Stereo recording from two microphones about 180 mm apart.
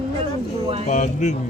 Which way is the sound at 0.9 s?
40° left (ahead or behind).